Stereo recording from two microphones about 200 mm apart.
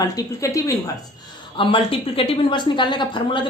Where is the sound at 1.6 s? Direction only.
25° left (ahead or behind).